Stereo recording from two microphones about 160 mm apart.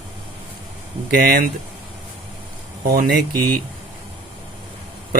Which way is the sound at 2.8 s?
65° right (ahead or behind).